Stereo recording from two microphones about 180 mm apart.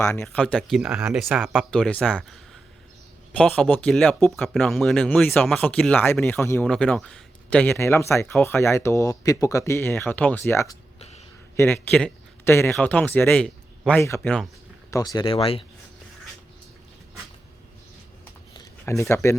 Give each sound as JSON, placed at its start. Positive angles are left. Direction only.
{"t": 0.0, "sound": "a man's voice", "side_deg": 10}
{"t": 14.8, "sound": "speech", "side_deg": 20}
{"t": 18.5, "sound": "a sound", "side_deg": 20}